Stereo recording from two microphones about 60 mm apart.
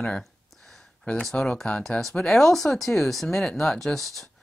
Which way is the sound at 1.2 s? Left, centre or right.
Centre.